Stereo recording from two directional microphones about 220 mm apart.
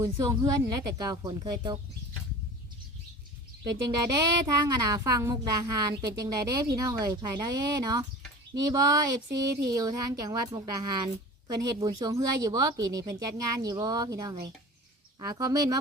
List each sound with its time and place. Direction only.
0.0 s speech: 15° right (ahead or behind)
3.8 s speech: 20° right (ahead or behind)